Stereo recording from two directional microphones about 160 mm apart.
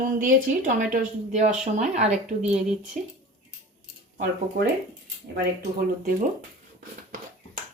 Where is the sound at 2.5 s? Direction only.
5° right (ahead or behind).